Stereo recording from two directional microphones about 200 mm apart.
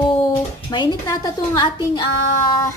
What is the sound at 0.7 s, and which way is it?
A woman's voice, 20° left (ahead or behind).